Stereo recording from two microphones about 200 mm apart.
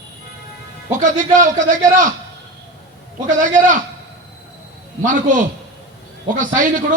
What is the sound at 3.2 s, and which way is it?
Speech, 40° right (ahead or behind).